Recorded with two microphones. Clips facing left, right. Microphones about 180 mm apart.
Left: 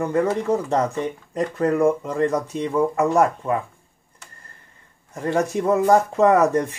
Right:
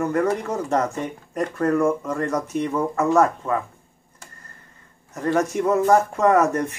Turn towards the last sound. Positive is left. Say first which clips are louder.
# left 1 dB
turn(degrees=15)  # may be behind; listen again after turning